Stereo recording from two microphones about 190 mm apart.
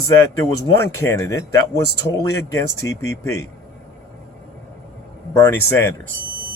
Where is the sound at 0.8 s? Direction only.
15° left (ahead or behind).